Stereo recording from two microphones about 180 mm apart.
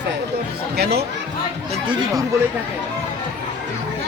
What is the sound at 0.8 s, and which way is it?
Speech, 65° right (ahead or behind).